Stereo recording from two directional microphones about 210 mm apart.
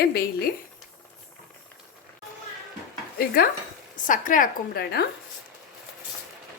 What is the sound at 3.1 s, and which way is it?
A woman's voice, 45° left (ahead or behind).